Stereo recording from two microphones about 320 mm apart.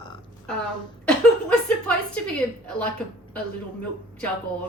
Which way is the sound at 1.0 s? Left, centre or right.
Centre.